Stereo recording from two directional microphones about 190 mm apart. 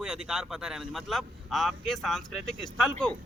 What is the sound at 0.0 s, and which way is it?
Speech, 5° right (ahead or behind).